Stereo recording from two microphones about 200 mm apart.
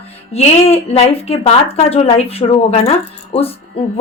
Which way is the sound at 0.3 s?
30° left (ahead or behind).